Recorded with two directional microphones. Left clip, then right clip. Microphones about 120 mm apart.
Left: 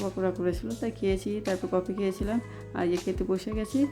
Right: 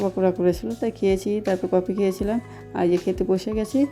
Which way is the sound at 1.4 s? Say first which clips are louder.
Right 7 dB; centre (ahead or behind).